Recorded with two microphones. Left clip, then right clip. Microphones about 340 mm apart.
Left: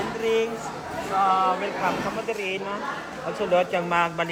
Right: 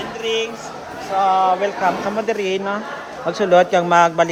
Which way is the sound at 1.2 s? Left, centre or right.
Centre.